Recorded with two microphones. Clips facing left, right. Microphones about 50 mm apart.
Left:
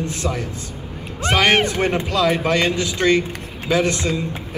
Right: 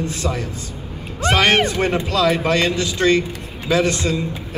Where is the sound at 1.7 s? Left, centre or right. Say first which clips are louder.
Right 1 dB; left.